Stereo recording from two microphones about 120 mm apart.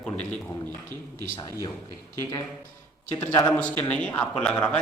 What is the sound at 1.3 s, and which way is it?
Speech, 30° left (ahead or behind).